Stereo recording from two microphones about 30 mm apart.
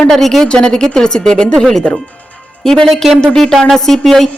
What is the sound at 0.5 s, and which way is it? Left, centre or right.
Speech, left.